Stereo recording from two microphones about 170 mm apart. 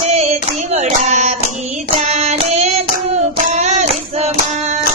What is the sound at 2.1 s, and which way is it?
Female singing, 40° right (ahead or behind).